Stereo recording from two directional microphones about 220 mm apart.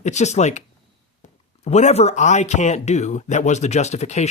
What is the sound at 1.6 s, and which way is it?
Speech, 30° left (ahead or behind).